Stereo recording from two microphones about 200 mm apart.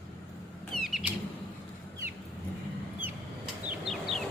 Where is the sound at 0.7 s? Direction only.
Centre (ahead or behind).